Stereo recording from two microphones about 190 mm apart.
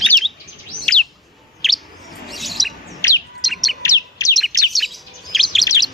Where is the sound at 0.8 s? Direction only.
5° left (ahead or behind).